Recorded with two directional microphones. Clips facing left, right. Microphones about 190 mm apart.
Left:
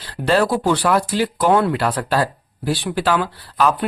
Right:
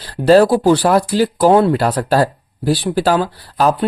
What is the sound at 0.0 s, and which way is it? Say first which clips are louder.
Speech: right 8 dB; 35° right (ahead or behind).